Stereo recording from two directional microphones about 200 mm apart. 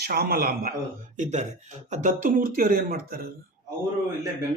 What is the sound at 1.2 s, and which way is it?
Speech, 35° right (ahead or behind).